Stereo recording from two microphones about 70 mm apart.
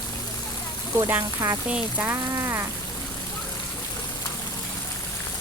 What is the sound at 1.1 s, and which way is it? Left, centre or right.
Speech, right.